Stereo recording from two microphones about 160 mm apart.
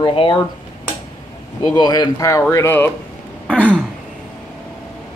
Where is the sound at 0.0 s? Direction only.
30° left (ahead or behind).